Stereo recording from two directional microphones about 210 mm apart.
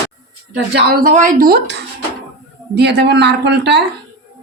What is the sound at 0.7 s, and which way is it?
Speech, 40° right (ahead or behind).